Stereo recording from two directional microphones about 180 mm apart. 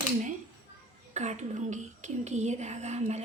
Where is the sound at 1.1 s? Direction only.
40° right (ahead or behind).